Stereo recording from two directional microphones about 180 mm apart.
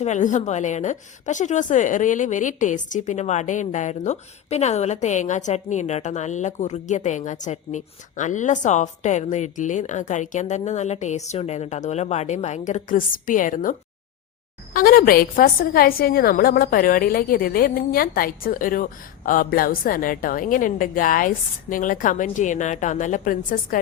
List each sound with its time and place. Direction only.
0.0 s a woman's voice: 40° left (ahead or behind)